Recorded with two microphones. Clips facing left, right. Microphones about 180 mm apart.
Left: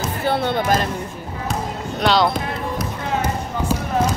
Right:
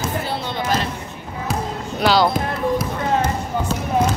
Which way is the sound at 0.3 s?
55° left (ahead or behind).